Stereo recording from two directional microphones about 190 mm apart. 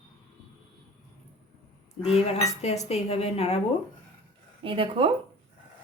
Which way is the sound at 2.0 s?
30° left (ahead or behind).